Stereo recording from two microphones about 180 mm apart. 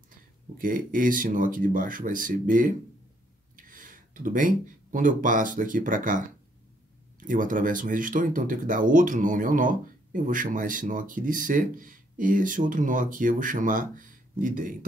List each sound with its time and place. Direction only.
0.6 s speech: 50° right (ahead or behind)